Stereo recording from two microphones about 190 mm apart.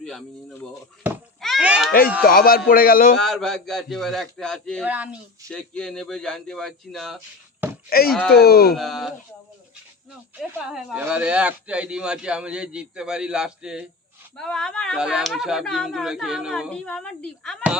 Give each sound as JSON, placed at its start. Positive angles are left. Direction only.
{"t": 1.4, "sound": "a sound", "side_deg": 0}
{"t": 1.9, "sound": "a man's voice", "side_deg": 50}
{"t": 3.2, "sound": "speech", "side_deg": 0}
{"t": 4.9, "sound": "speech", "side_deg": -10}
{"t": 5.5, "sound": "speech", "side_deg": 5}
{"t": 7.9, "sound": "a man's voice", "side_deg": 55}
{"t": 8.7, "sound": "speech", "side_deg": 0}
{"t": 10.7, "sound": "speech", "side_deg": -5}